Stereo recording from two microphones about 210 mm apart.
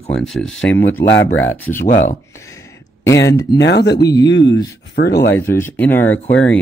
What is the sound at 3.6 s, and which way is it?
Speech, 55° left (ahead or behind).